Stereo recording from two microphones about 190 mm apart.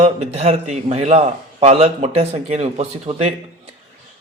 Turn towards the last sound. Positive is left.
turn(degrees=-35)  # may be behind; listen again after turning